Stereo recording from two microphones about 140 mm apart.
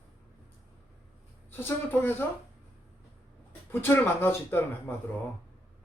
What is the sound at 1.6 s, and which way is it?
Speech, 15° left (ahead or behind).